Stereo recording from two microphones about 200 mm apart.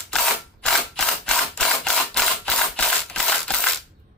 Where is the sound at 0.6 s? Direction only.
5° left (ahead or behind).